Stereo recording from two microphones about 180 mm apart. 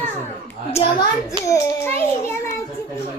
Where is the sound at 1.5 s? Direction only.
10° left (ahead or behind).